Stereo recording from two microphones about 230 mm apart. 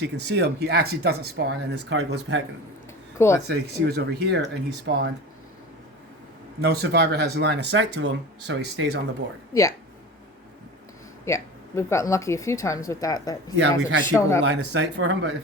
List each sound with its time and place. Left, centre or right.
0.0 s speech: right
3.2 s speech: centre
3.4 s speech: right
6.6 s speech: right
11.3 s speech: centre
13.6 s speech: right
14.1 s speech: centre
14.4 s speech: right